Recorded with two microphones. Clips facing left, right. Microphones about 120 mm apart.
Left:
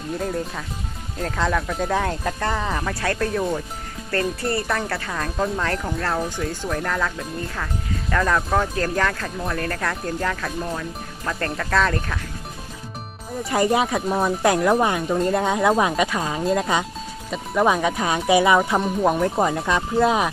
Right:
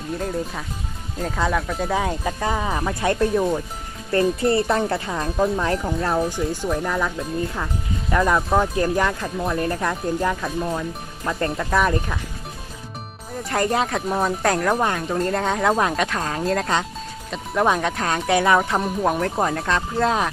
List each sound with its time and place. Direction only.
0.2 s speech: centre (ahead or behind)
8.1 s speech: 15° right (ahead or behind)
13.4 s speech: 5° left (ahead or behind)